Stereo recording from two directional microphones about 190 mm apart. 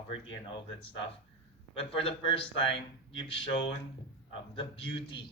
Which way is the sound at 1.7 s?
30° left (ahead or behind).